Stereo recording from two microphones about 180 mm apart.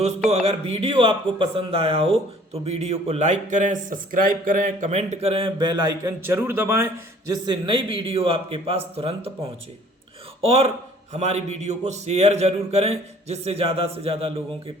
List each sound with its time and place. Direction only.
0.3 s speech: 35° right (ahead or behind); by 7.3 s 15° right (ahead or behind)
7.4 s speech: 25° right (ahead or behind)